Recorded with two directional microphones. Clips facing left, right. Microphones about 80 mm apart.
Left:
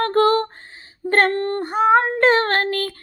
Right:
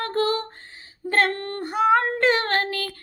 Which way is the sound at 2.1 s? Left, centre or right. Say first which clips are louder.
Left 4 dB; left.